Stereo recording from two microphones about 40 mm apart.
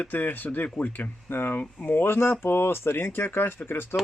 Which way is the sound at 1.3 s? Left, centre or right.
Left.